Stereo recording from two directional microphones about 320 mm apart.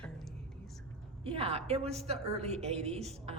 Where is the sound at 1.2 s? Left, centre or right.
Centre.